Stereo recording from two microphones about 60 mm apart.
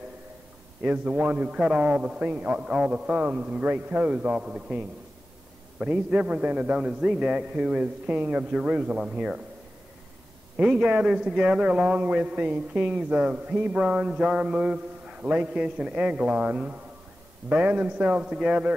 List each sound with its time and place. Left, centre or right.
0.8 s a man's voice: right
10.6 s a man's voice: centre